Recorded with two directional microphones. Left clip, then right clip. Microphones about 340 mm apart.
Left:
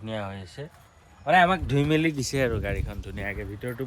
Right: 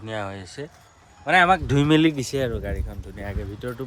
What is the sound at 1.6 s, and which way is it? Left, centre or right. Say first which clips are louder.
Speech: right 5 dB; right.